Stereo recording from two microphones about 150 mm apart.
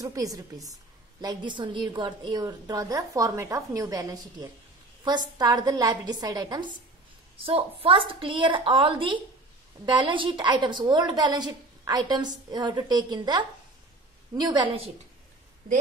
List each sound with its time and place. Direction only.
0.0 s a woman's voice: 25° right (ahead or behind)
7.4 s a woman's voice: 40° right (ahead or behind)